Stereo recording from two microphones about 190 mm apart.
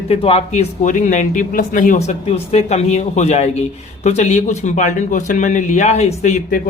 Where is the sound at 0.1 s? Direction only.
30° left (ahead or behind).